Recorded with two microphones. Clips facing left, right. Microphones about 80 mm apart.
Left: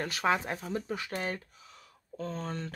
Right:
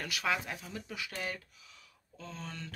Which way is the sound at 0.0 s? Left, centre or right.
Left.